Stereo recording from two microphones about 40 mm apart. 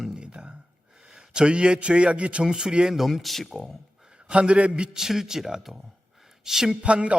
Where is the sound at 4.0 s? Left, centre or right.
Right.